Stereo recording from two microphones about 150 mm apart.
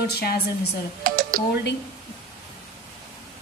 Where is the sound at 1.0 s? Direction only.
70° right (ahead or behind).